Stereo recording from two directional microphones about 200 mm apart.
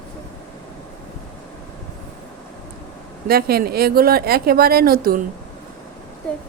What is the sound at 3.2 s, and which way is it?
Speech, 50° right (ahead or behind).